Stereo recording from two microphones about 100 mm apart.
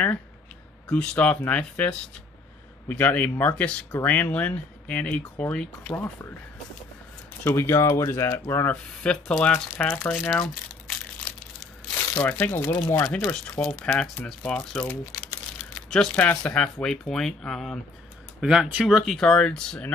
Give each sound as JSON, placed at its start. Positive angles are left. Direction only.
{"t": 0.8, "sound": "speech", "side_deg": 15}
{"t": 7.5, "sound": "speech", "side_deg": 25}
{"t": 9.0, "sound": "speech", "side_deg": 10}
{"t": 10.3, "sound": "crumpling", "side_deg": 5}
{"t": 12.2, "sound": "speech", "side_deg": 20}
{"t": 13.1, "sound": "speech", "side_deg": 15}
{"t": 15.9, "sound": "speech", "side_deg": 10}
{"t": 18.4, "sound": "speech", "side_deg": -5}